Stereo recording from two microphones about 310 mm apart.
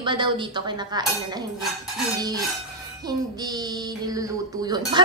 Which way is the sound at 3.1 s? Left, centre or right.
Centre.